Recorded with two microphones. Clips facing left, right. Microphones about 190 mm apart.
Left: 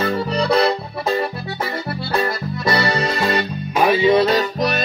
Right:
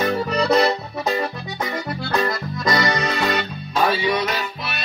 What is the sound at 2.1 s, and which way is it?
Accordion, 30° left (ahead or behind).